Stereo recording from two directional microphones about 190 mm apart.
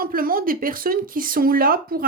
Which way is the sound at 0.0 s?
50° right (ahead or behind).